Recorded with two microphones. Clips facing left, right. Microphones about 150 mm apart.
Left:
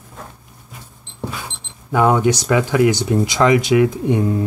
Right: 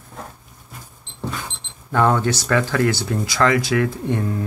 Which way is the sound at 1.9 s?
10° left (ahead or behind).